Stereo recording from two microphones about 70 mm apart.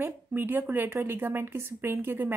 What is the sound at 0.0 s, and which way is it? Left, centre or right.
Speech, right.